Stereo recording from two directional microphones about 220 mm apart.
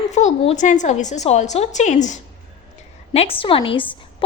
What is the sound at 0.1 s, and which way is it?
A woman's voice, 30° left (ahead or behind).